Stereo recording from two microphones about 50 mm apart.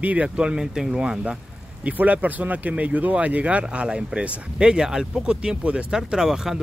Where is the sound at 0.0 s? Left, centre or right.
Right.